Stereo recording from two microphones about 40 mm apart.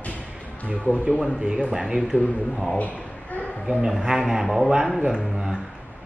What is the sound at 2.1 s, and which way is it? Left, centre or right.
Speech, right.